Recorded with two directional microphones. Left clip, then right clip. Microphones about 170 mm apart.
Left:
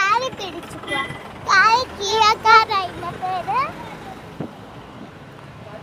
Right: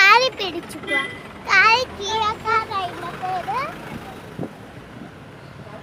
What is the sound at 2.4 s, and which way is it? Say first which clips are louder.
Speech: left 8 dB; 25° left (ahead or behind).